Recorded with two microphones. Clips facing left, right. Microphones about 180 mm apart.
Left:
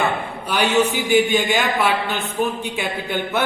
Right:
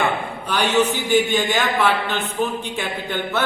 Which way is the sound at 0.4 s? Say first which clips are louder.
Left 1 dB; 10° left (ahead or behind).